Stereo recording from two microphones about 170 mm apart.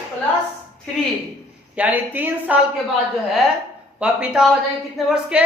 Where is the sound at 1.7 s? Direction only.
10° right (ahead or behind).